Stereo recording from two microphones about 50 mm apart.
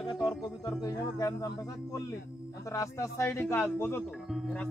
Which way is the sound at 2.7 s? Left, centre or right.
Left.